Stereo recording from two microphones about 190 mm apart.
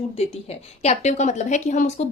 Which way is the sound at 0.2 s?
35° left (ahead or behind).